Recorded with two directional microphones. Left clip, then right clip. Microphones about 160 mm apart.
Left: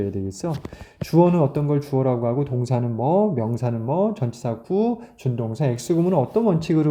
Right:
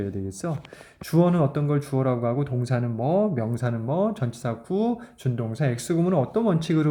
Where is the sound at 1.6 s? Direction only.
20° left (ahead or behind).